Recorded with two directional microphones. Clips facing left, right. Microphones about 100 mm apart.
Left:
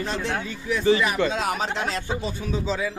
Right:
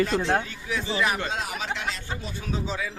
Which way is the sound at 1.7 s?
40° left (ahead or behind).